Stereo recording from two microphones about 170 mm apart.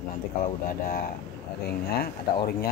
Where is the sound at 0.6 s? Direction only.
60° left (ahead or behind).